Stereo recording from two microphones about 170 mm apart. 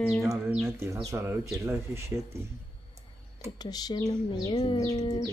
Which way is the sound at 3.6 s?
25° left (ahead or behind).